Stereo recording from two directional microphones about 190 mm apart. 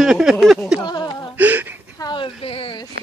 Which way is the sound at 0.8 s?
20° left (ahead or behind).